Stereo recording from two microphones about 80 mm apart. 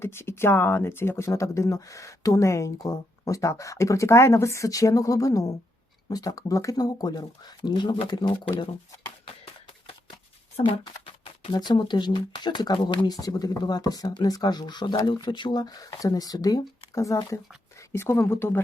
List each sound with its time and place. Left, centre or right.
0.0 s speech: left
11.5 s speech: left
13.1 s speech: left
17.9 s a woman's voice: left